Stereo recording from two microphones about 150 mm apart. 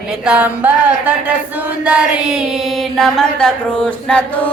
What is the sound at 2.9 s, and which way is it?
Chant, 5° left (ahead or behind).